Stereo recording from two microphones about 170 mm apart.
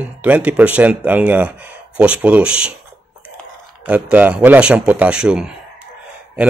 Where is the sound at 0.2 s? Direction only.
10° right (ahead or behind).